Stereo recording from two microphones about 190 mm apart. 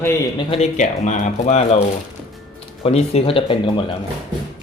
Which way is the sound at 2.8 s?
30° left (ahead or behind).